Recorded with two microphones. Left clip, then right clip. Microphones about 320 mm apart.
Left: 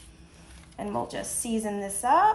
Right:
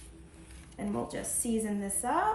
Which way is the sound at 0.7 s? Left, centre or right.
Centre.